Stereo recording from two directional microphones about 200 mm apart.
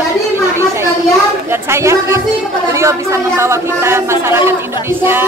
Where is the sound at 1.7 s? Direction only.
15° right (ahead or behind).